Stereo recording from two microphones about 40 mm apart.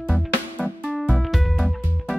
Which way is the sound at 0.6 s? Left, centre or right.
Left.